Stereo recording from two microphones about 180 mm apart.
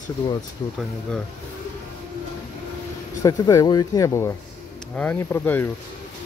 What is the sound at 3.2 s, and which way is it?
Speech, 20° left (ahead or behind).